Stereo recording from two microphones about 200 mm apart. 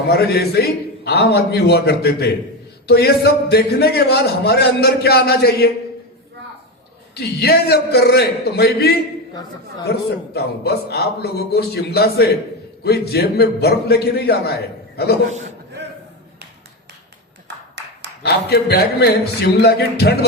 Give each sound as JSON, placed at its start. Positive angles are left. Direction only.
{"t": 0.1, "sound": "a man's voice", "side_deg": 50}
{"t": 7.1, "sound": "a man's voice", "side_deg": 55}
{"t": 17.8, "sound": "a sound", "side_deg": -60}
{"t": 18.2, "sound": "a man's voice", "side_deg": 55}